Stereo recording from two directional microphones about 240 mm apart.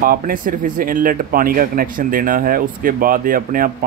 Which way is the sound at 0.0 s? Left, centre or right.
Right.